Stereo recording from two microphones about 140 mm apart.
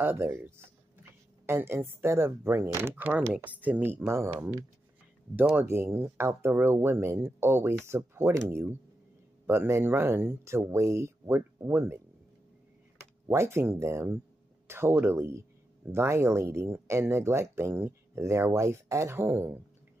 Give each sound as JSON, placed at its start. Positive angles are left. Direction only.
{"t": 0.0, "sound": "speech", "side_deg": -15}
{"t": 13.3, "sound": "speech", "side_deg": -20}